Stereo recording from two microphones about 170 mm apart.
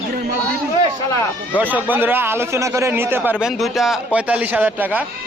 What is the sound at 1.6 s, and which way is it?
Speech, 10° right (ahead or behind).